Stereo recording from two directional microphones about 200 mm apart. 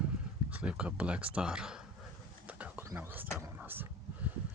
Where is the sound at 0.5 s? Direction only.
5° right (ahead or behind).